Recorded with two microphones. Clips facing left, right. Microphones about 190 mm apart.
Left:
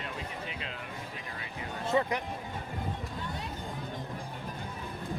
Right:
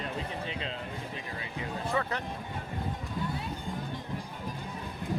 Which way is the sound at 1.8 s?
20° left (ahead or behind).